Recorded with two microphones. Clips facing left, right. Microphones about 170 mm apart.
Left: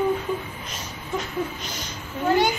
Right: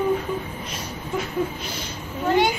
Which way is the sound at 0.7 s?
5° right (ahead or behind).